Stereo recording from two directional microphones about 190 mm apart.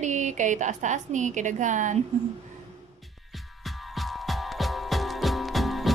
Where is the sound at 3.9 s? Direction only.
Centre (ahead or behind).